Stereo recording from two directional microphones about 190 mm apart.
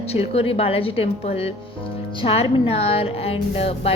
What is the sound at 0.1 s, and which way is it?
A woman's voice, 30° left (ahead or behind).